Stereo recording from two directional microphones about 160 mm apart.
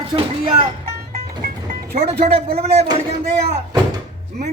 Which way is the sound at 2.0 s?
35° right (ahead or behind).